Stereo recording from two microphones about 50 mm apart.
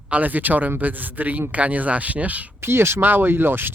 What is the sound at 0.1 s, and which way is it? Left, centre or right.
Speech, right.